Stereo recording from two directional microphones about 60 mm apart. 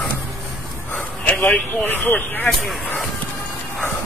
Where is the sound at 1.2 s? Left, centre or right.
Left.